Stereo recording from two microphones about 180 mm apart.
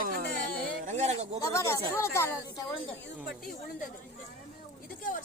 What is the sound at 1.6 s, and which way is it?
Speech, 15° left (ahead or behind).